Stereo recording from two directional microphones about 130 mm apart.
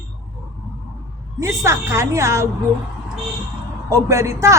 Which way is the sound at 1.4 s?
20° right (ahead or behind).